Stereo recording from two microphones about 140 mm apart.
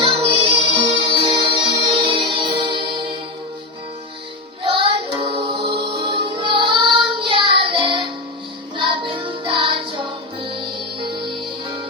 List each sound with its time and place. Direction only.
0.0 s music: 40° right (ahead or behind)
4.6 s music: 35° right (ahead or behind)